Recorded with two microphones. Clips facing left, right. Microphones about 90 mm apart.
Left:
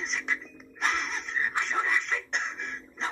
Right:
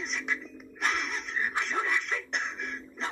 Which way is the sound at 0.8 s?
25° left (ahead or behind).